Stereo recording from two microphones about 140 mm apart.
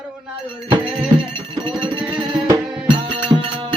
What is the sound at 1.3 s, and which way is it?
Music, 35° right (ahead or behind).